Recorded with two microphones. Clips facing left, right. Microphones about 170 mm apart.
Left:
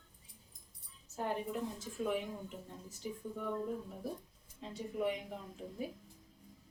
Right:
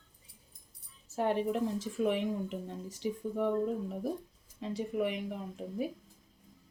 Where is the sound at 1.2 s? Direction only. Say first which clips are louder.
Right 7 dB; 75° right (ahead or behind).